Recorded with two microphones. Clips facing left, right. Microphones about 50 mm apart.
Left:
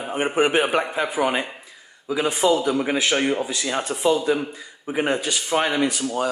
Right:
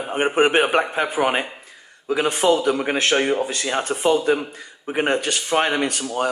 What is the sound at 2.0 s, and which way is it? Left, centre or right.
Speech, right.